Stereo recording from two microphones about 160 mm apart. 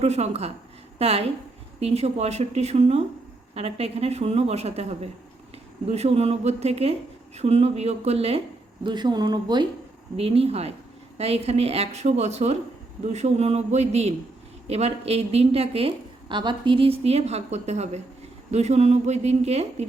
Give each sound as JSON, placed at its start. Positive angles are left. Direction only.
{"t": 0.0, "sound": "a woman's voice", "side_deg": -40}
{"t": 8.8, "sound": "speech", "side_deg": -30}
{"t": 10.2, "sound": "a woman's voice", "side_deg": -40}